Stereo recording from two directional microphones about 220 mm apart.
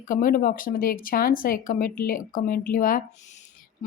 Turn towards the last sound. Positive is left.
turn(degrees=35)  # may be behind; listen again after turning